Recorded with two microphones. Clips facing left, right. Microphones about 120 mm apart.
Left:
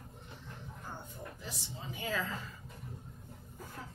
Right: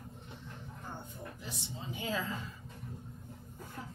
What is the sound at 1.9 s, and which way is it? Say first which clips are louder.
Speech: even; 20° right (ahead or behind).